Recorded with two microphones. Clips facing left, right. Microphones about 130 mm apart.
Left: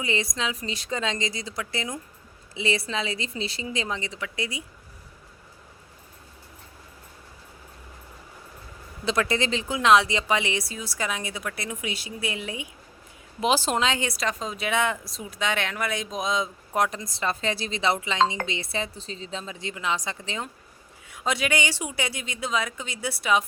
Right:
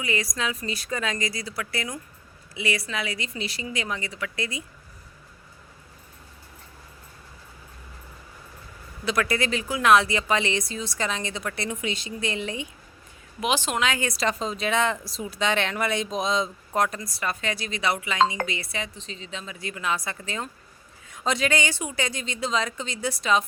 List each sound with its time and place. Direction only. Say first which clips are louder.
0.0 s speech: even; 25° left (ahead or behind)
9.0 s speech: even; 25° left (ahead or behind); by 12.6 s 5° left (ahead or behind)
13.4 s speech: left 2 dB; 35° left (ahead or behind)
14.1 s speech: right 3 dB; centre (ahead or behind)